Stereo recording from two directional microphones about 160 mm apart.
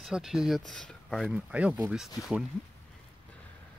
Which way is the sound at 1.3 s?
10° right (ahead or behind).